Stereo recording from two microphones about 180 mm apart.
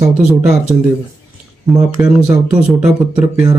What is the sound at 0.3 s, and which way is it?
Speech, centre (ahead or behind).